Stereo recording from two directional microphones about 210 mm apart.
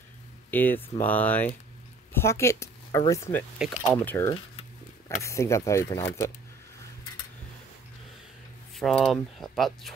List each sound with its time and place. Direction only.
0.5 s speech: 10° left (ahead or behind)
3.5 s speech: 5° right (ahead or behind)
4.0 s speech: 10° left (ahead or behind)
4.3 s a sound: 20° left (ahead or behind)
5.2 s speech: 15° left (ahead or behind)
8.7 s speech: centre (ahead or behind)